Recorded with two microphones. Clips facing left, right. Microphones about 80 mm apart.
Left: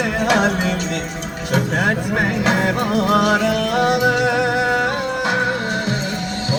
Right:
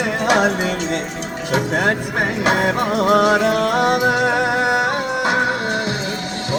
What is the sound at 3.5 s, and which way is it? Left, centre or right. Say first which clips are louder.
Music: right 2 dB; right.